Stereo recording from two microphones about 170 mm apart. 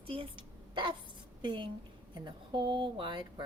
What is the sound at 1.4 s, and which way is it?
A woman's voice, 30° right (ahead or behind).